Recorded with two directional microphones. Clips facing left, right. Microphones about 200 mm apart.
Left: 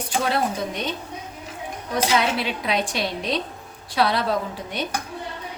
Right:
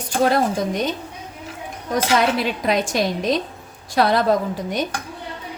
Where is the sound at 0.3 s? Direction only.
45° right (ahead or behind).